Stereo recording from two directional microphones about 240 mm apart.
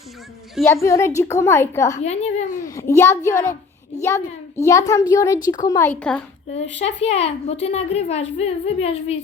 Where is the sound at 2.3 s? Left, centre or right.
Left.